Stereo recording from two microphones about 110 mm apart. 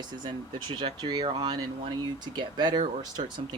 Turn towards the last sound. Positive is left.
turn(degrees=-40)  # may be behind; listen again after turning